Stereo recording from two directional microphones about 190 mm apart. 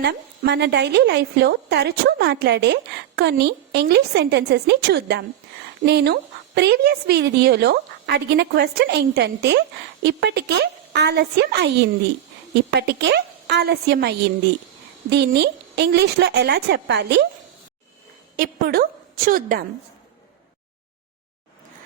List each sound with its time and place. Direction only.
0.0 s a woman's voice: 60° right (ahead or behind)
18.3 s a woman's voice: 55° right (ahead or behind)